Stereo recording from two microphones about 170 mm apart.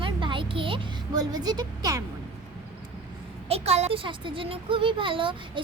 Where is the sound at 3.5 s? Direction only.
40° right (ahead or behind).